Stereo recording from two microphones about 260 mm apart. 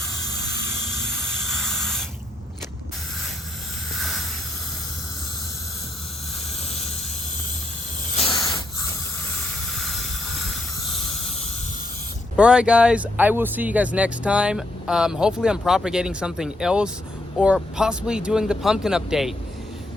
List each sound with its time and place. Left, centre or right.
1.2 s spray: centre
8.1 s hiss: left
9.4 s hiss: centre
10.9 s a sound: left
12.4 s speech: centre